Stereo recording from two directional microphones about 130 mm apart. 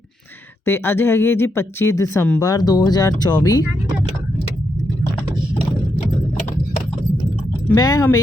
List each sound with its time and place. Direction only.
0.6 s speech: 20° left (ahead or behind)
7.8 s speech: 30° left (ahead or behind)